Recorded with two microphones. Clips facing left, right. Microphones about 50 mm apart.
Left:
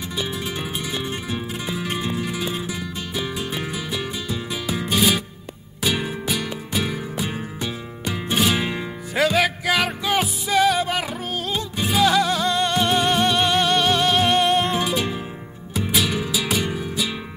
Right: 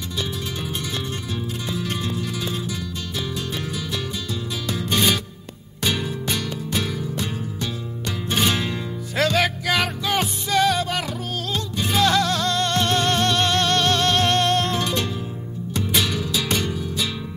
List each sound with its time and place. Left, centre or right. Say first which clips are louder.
1.3 s music: left 1 dB; centre
6.2 s music: even; centre
6.8 s music: left 3 dB; centre
8.3 s music: left 1 dB; centre
8.5 s music: left 1 dB; centre
16.3 s music: even; centre